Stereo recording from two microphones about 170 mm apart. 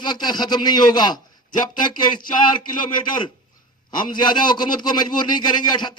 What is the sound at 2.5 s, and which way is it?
A man's voice, 25° left (ahead or behind).